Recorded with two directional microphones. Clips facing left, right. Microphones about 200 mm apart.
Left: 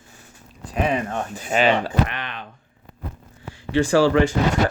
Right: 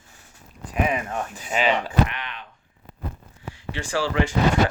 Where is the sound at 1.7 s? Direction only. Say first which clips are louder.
Left 1 dB; 35° left (ahead or behind).